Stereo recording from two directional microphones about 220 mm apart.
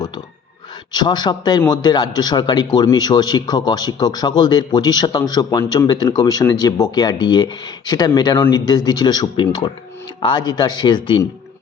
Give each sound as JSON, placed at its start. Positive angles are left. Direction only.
{"t": 0.9, "sound": "speech", "side_deg": 20}